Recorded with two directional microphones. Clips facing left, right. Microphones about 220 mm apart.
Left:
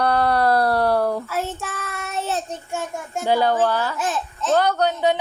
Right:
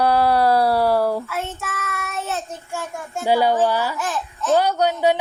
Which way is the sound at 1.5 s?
30° left (ahead or behind).